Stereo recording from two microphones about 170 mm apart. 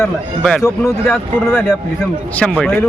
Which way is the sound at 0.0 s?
5° left (ahead or behind).